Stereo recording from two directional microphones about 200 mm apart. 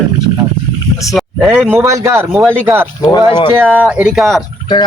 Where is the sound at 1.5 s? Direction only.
10° right (ahead or behind).